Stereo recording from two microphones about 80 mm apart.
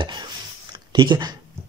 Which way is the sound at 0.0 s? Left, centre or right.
Right.